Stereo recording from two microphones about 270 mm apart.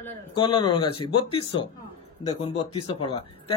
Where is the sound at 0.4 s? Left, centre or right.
Centre.